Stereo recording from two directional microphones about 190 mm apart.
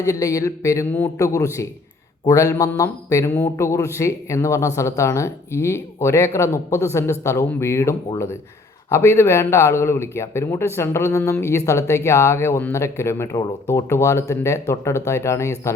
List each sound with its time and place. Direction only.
0.0 s speech: 15° left (ahead or behind)